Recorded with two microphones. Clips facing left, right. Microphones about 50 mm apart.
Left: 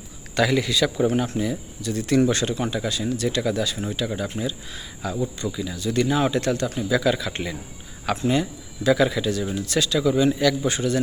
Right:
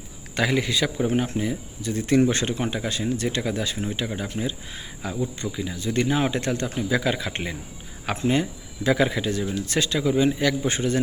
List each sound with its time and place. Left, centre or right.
0.3 s a man's voice: centre